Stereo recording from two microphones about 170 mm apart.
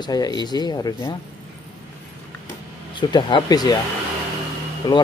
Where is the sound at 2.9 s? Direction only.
25° left (ahead or behind).